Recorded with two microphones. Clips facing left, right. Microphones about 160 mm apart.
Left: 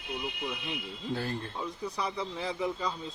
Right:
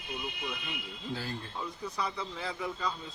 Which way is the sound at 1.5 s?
15° left (ahead or behind).